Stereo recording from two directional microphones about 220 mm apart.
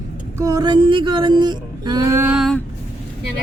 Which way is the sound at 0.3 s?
15° right (ahead or behind).